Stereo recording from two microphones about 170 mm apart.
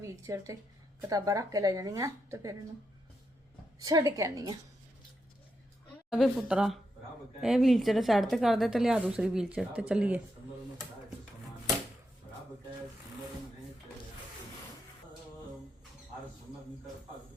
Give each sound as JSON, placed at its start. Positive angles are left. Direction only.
{"t": 0.0, "sound": "a woman's voice", "side_deg": -20}
{"t": 3.8, "sound": "speech", "side_deg": -20}
{"t": 6.1, "sound": "speech", "side_deg": 0}